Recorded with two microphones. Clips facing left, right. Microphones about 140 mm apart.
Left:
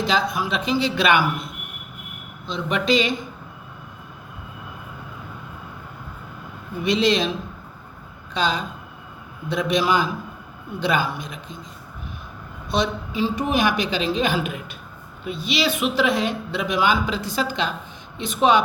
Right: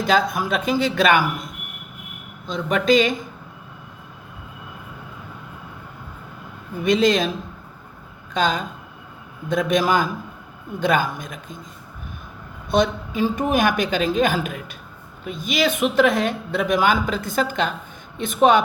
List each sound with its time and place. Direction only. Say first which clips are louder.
0.0 s speech: right 3 dB; 50° right (ahead or behind)
2.5 s speech: right 3 dB; 45° right (ahead or behind)
6.8 s speech: right 2 dB; 45° right (ahead or behind)
8.3 s speech: right 2 dB; 50° right (ahead or behind)
12.7 s speech: right 4 dB; 50° right (ahead or behind)